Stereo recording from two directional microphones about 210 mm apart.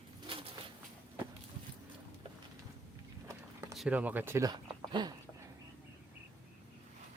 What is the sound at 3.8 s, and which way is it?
Speech, 5° right (ahead or behind).